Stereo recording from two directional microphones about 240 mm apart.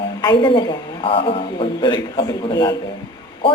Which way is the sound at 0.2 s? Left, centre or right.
Centre.